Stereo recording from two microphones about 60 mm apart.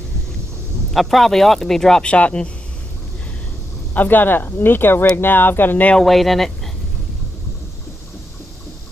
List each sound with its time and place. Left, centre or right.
0.9 s speech: centre
3.9 s speech: left
5.9 s speech: centre